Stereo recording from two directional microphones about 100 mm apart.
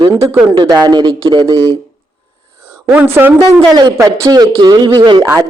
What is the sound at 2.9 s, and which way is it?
Speech, 20° right (ahead or behind).